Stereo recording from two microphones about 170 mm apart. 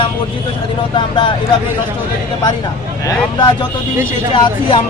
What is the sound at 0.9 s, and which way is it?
Speech, 30° left (ahead or behind).